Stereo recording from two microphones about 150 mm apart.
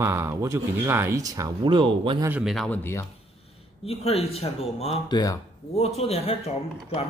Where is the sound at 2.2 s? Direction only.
10° right (ahead or behind).